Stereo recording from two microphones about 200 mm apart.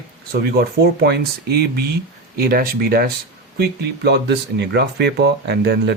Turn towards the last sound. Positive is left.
turn(degrees=-55)  # may be behind; listen again after turning